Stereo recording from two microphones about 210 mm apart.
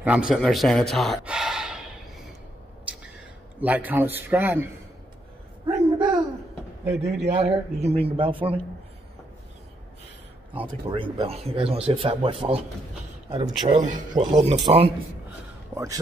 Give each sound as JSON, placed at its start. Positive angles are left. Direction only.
{"t": 0.0, "sound": "a sound", "side_deg": -5}
{"t": 3.6, "sound": "a man's voice", "side_deg": -10}
{"t": 5.7, "sound": "a sound", "side_deg": -20}
{"t": 7.2, "sound": "a man's voice", "side_deg": -30}
{"t": 10.5, "sound": "a man's voice", "side_deg": -25}
{"t": 13.7, "sound": "a man's voice", "side_deg": -35}
{"t": 15.7, "sound": "speech", "side_deg": -15}